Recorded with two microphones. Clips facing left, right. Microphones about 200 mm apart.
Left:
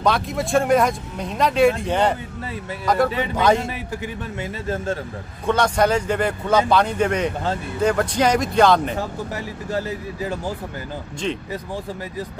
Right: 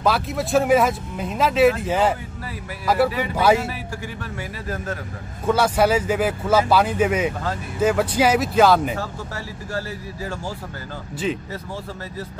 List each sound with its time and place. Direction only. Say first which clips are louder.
0.0 s speech: left 1 dB; 5° right (ahead or behind)
4.4 s speech: left 5 dB; 25° left (ahead or behind)
5.5 s speech: even; 5° right (ahead or behind)
8.9 s speech: left 3 dB; 20° left (ahead or behind)